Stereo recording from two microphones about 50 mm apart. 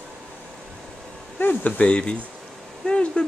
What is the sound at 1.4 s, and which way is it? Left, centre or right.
Speech, left.